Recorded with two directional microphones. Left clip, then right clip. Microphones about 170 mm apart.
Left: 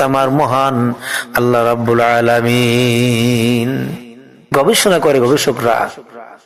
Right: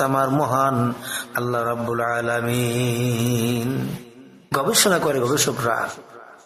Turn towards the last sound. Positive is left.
turn(degrees=20)  # may be behind; listen again after turning